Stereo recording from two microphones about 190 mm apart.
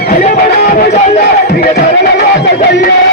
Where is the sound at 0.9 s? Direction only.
35° left (ahead or behind).